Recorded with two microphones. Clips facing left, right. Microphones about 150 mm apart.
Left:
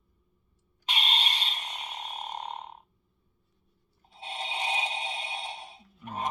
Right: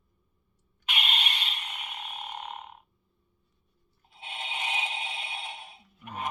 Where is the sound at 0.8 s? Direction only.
35° left (ahead or behind).